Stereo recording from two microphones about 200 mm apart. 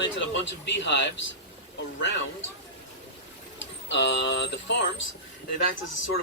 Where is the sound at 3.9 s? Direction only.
60° left (ahead or behind).